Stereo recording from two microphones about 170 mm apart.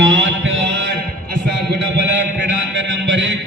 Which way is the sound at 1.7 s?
90° right.